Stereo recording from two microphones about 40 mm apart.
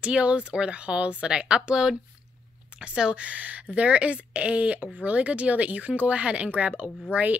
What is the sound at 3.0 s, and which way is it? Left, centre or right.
A woman's voice, right.